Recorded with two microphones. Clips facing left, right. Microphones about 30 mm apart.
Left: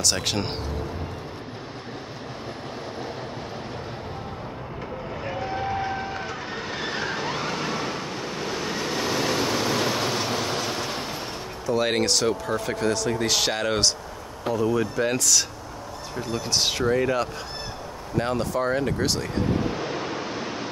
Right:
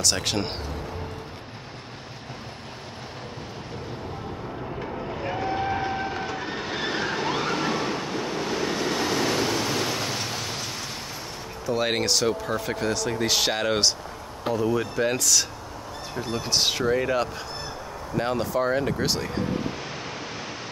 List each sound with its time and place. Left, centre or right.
0.0 s speech: centre
5.1 s vehicle: centre
11.6 s speech: centre
16.3 s speech: centre
16.5 s speech: centre
19.9 s vehicle: centre